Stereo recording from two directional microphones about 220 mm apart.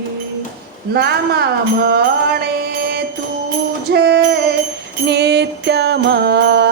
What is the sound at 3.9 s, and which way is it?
Music, 50° right (ahead or behind).